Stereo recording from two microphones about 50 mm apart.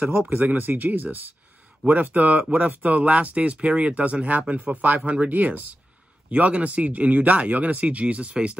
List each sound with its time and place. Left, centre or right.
0.3 s speech: right